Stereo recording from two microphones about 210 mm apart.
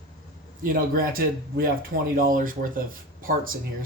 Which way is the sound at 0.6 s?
45° right (ahead or behind).